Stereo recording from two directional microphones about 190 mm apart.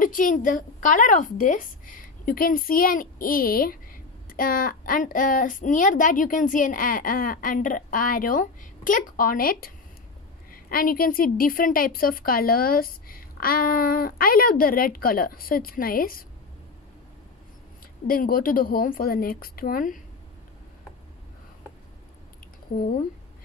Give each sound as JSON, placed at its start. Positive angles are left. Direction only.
{"t": 0.0, "sound": "a woman's voice", "side_deg": 45}
{"t": 18.0, "sound": "a woman's voice", "side_deg": 50}